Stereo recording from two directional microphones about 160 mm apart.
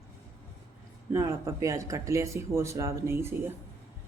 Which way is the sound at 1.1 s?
20° right (ahead or behind).